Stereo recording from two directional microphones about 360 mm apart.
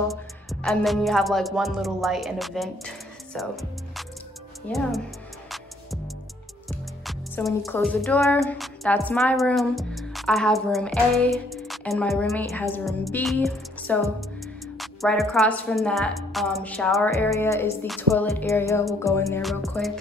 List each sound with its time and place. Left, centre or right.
0.1 s a woman's voice: centre
4.6 s a woman's voice: centre
6.7 s music: centre
14.8 s a woman's voice: centre